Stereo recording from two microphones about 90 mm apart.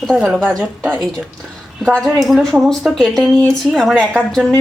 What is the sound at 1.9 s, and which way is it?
Speech, 10° left (ahead or behind).